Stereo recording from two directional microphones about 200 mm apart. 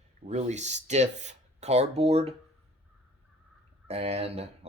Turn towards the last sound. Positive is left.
turn(degrees=-30)  # may be behind; listen again after turning